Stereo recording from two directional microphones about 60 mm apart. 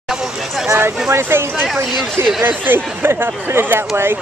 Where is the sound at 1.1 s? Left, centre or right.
Right.